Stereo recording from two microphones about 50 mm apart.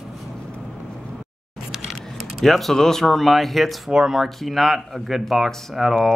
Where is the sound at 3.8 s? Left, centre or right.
Centre.